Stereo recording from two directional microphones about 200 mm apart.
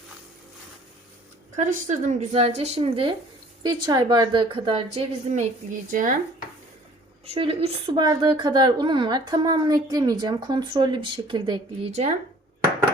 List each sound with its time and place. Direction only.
1.5 s a woman's voice: 35° right (ahead or behind)
7.3 s a woman's voice: 30° right (ahead or behind)